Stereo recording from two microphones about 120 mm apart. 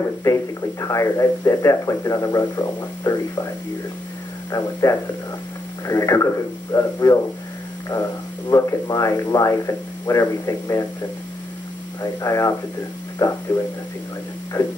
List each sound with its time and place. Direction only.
0.2 s speech: 25° left (ahead or behind)
4.5 s speech: 30° left (ahead or behind)
12.0 s speech: 30° left (ahead or behind)